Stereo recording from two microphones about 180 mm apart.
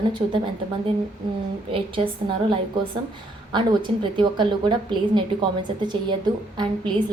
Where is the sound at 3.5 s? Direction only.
25° right (ahead or behind).